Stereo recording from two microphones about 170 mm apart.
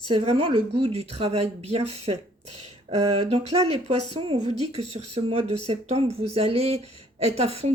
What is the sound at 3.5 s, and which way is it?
Speech, 40° right (ahead or behind).